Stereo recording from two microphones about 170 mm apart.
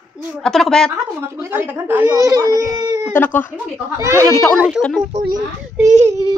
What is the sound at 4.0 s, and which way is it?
Speech, 15° right (ahead or behind).